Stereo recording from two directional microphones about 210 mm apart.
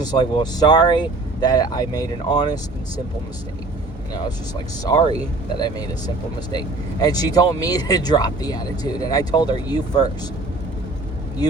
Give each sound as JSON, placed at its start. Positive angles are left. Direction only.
{"t": 0.0, "sound": "speech", "side_deg": 20}
{"t": 4.1, "sound": "speech", "side_deg": 20}